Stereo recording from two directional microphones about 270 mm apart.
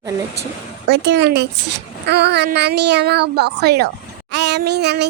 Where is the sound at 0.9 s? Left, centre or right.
Right.